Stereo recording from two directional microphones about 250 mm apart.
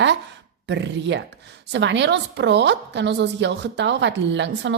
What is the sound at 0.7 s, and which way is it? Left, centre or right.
A woman's voice, right.